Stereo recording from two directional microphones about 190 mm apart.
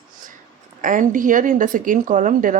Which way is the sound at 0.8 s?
45° right (ahead or behind).